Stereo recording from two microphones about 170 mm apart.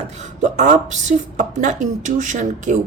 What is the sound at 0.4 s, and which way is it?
Speech, 45° right (ahead or behind).